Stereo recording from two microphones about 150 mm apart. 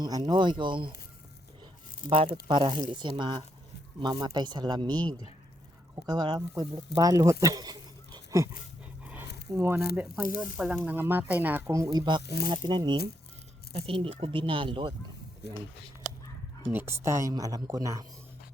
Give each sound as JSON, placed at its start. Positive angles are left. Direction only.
{"t": 0.0, "sound": "speech", "side_deg": -30}
{"t": 2.0, "sound": "speech", "side_deg": -40}
{"t": 4.9, "sound": "speech", "side_deg": 10}
{"t": 6.1, "sound": "speech", "side_deg": -30}
{"t": 9.0, "sound": "squish", "side_deg": -15}
{"t": 9.9, "sound": "speech", "side_deg": -10}
{"t": 16.6, "sound": "speech", "side_deg": -15}